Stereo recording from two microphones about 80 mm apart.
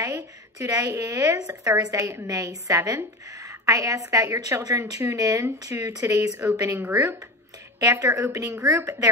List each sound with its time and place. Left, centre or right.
0.0 s a woman's voice: right
7.8 s a woman's voice: right